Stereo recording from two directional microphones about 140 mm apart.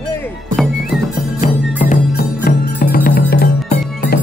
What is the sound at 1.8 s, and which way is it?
Music, 85° left.